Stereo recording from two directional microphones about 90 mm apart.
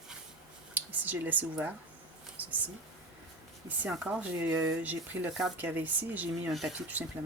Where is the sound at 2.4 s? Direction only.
20° right (ahead or behind).